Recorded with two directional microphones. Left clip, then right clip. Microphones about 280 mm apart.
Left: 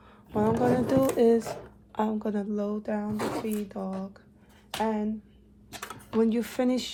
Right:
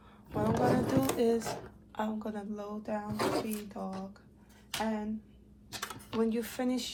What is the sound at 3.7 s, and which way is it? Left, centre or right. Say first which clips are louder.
Speech: left 5 dB; left.